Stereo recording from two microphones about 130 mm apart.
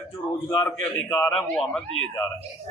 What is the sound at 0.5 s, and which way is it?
Speech, 25° left (ahead or behind).